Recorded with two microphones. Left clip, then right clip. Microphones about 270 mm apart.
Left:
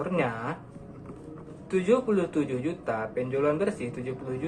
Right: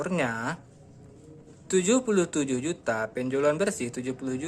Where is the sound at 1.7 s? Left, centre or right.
Right.